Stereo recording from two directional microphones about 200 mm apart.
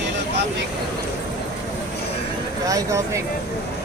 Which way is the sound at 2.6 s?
15° right (ahead or behind).